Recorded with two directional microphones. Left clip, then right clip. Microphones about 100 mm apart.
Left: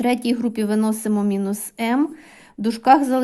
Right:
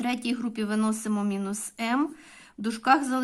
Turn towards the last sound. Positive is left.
turn(degrees=40)  # may be behind; listen again after turning